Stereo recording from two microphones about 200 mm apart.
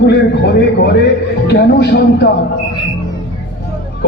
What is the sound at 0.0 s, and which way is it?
A man's voice, 55° left (ahead or behind).